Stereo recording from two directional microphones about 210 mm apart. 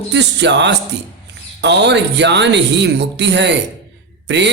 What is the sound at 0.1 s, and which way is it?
Speech, 55° right (ahead or behind).